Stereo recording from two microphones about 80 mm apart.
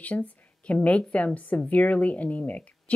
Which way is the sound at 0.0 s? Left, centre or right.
Centre.